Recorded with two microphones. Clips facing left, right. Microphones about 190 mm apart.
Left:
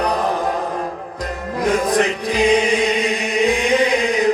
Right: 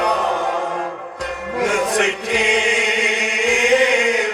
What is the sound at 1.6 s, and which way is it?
Chant, 35° left (ahead or behind).